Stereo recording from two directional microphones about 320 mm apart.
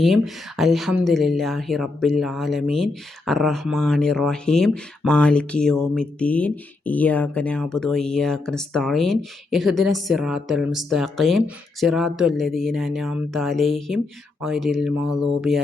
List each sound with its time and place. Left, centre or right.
0.0 s speech: centre